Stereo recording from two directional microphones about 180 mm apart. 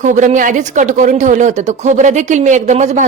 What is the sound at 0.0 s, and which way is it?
A woman's voice, 40° right (ahead or behind).